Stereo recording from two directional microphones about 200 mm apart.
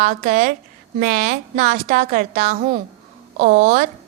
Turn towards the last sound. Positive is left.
turn(degrees=-35)  # may be behind; listen again after turning